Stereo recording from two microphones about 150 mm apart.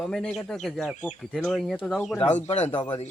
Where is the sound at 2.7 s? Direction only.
35° left (ahead or behind).